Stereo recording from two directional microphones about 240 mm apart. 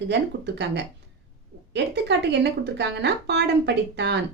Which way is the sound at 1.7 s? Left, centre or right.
Right.